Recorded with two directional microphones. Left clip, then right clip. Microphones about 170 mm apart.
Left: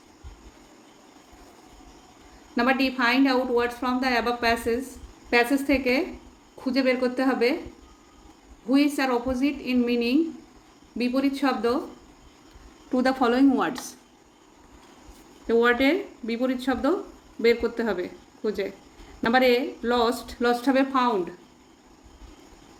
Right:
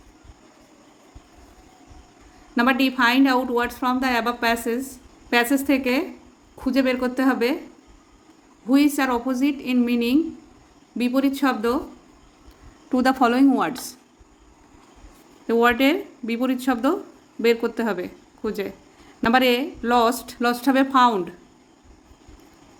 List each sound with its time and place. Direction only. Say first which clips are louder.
2.6 s speech: right 4 dB; 50° right (ahead or behind)
8.7 s speech: right 3 dB; 50° right (ahead or behind)
12.9 s a woman's voice: right 3 dB; 45° right (ahead or behind)
15.4 s speech: right 2 dB; 45° right (ahead or behind)